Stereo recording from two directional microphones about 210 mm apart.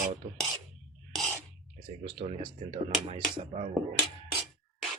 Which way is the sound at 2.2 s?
25° right (ahead or behind).